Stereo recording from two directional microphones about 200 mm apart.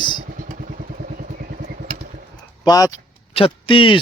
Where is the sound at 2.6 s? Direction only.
20° left (ahead or behind).